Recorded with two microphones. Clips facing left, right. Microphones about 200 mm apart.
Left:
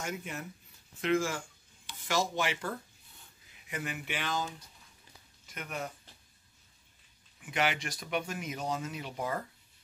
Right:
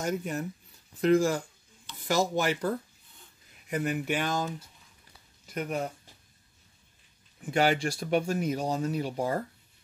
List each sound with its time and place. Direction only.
0.0 s speech: 40° right (ahead or behind)
5.5 s speech: 35° right (ahead or behind)
7.3 s speech: 35° right (ahead or behind)